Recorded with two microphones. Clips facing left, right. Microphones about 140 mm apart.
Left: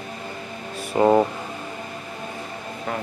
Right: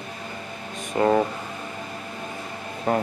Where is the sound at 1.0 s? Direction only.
20° left (ahead or behind).